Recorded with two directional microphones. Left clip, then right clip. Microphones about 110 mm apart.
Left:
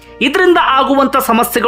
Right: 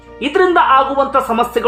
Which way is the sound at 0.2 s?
75° left (ahead or behind).